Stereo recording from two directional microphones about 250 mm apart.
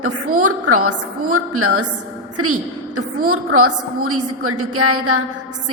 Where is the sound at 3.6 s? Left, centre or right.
Right.